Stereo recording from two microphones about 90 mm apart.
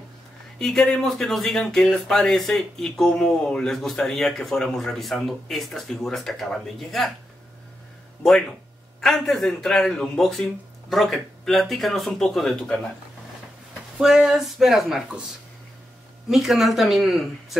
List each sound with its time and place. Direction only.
0.6 s speech: 5° left (ahead or behind)
8.2 s speech: 5° left (ahead or behind)
13.9 s speech: 5° right (ahead or behind)
16.3 s speech: centre (ahead or behind)